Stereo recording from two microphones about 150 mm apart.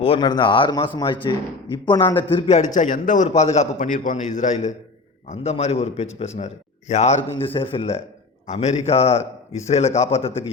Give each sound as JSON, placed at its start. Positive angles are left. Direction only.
{"t": 0.0, "sound": "a man's voice", "side_deg": 35}
{"t": 2.7, "sound": "a man's voice", "side_deg": 60}
{"t": 5.3, "sound": "a man's voice", "side_deg": 45}
{"t": 7.5, "sound": "a man's voice", "side_deg": 35}